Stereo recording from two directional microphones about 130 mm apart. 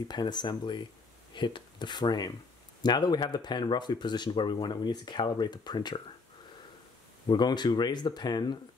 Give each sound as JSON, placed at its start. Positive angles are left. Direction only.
{"t": 0.1, "sound": "speech", "side_deg": 35}
{"t": 7.2, "sound": "speech", "side_deg": 35}